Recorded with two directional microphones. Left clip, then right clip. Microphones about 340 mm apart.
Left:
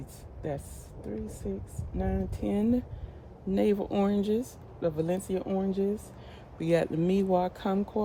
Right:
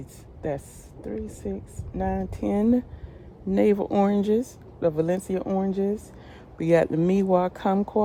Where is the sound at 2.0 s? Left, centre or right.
Centre.